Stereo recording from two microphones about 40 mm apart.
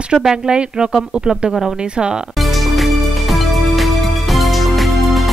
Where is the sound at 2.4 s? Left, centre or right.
Centre.